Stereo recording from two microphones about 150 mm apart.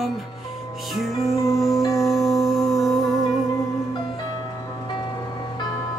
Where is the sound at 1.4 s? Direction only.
20° left (ahead or behind).